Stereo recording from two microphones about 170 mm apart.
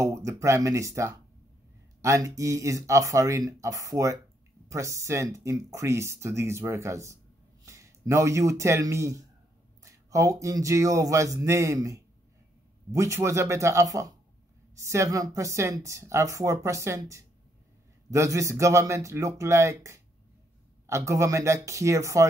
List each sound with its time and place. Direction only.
0.0 s speech: 20° right (ahead or behind)